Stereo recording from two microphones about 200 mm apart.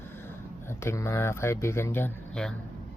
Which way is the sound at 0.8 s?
15° left (ahead or behind).